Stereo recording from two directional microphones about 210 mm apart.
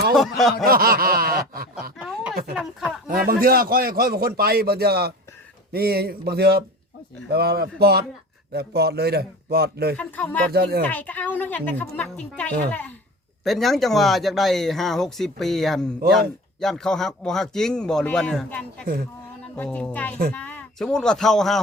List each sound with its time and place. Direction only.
0.1 s speech: centre (ahead or behind)
0.6 s snicker: 45° right (ahead or behind)
2.0 s a sound: 5° right (ahead or behind)
2.6 s speech: 5° right (ahead or behind)
3.2 s a man's voice: 45° right (ahead or behind)
10.0 s a woman's voice: 5° left (ahead or behind)
10.5 s a man's voice: 50° right (ahead or behind)
10.8 s a woman's voice: 5° left (ahead or behind)